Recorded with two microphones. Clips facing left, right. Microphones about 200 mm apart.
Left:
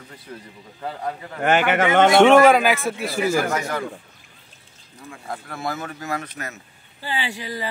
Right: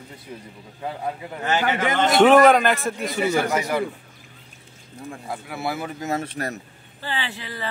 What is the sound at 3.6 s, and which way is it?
Speech, 10° right (ahead or behind).